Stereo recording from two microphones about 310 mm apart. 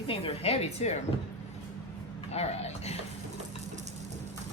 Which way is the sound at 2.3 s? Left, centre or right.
Left.